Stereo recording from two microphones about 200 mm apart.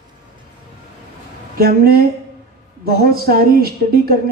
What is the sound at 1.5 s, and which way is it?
Speech, 50° right (ahead or behind).